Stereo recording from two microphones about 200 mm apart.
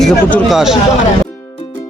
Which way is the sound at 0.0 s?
5° left (ahead or behind).